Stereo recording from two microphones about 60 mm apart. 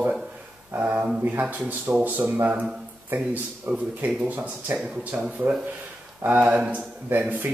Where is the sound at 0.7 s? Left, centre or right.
Right.